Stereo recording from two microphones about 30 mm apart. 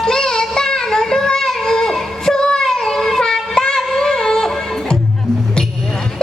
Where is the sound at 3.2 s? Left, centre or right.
Left.